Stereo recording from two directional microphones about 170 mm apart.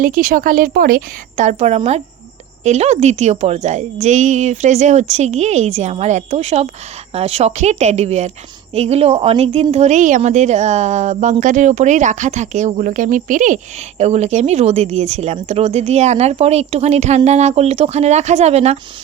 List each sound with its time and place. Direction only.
0.0 s a woman's voice: 55° right (ahead or behind)
1.4 s a woman's voice: 45° right (ahead or behind)